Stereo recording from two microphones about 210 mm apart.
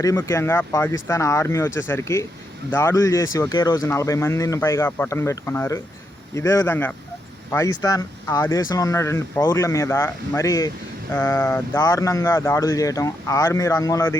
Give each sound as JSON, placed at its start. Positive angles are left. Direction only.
{"t": 0.0, "sound": "speech", "side_deg": 15}